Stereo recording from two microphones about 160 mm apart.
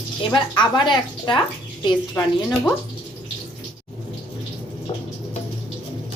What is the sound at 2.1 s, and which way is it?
Speech, 10° left (ahead or behind).